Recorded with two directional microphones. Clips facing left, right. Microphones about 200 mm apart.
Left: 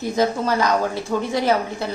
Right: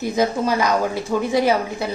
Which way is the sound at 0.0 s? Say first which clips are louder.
Right 1 dB; 10° right (ahead or behind).